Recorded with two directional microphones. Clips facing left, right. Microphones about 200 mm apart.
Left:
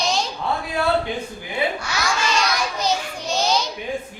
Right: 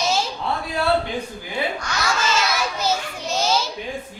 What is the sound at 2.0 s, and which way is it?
Children playing, 5° right (ahead or behind).